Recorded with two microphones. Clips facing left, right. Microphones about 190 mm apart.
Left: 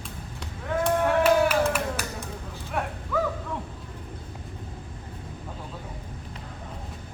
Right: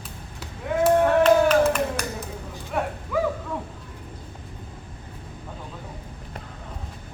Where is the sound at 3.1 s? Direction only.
10° right (ahead or behind).